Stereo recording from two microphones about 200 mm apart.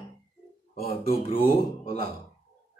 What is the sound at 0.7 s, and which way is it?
Speech, 45° left (ahead or behind).